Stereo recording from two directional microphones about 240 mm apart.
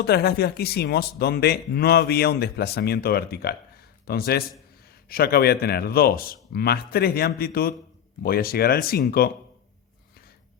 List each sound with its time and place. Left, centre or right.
0.0 s speech: left